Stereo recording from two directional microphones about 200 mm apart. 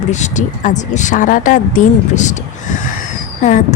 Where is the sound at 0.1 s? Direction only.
35° left (ahead or behind).